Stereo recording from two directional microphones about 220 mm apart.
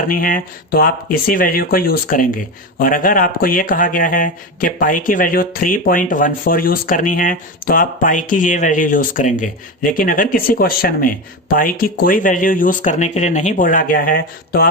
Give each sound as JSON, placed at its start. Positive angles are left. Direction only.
{"t": 0.1, "sound": "speech", "side_deg": 40}